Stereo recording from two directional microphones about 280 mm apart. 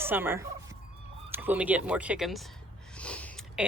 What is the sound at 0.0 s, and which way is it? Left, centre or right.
A woman's voice, centre.